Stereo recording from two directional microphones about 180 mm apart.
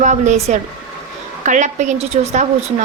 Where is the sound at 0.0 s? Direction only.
40° right (ahead or behind).